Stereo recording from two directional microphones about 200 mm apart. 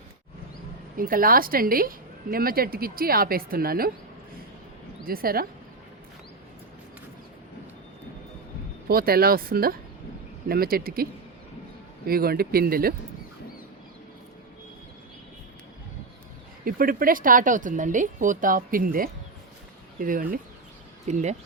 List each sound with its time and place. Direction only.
0.9 s speech: 45° right (ahead or behind)
5.0 s speech: 45° right (ahead or behind)
8.9 s speech: 50° right (ahead or behind)
16.6 s speech: 45° right (ahead or behind)